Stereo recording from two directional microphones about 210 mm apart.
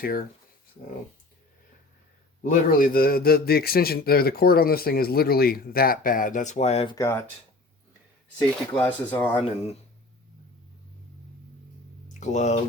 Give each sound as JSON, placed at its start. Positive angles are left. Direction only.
{"t": 0.0, "sound": "a man's voice", "side_deg": 45}
{"t": 2.4, "sound": "a man's voice", "side_deg": 40}
{"t": 6.9, "sound": "speech", "side_deg": 15}
{"t": 8.7, "sound": "speech", "side_deg": 10}
{"t": 12.0, "sound": "a sound", "side_deg": 35}